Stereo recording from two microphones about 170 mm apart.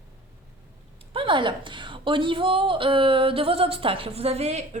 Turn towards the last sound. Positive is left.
turn(degrees=-40)  # may be behind; listen again after turning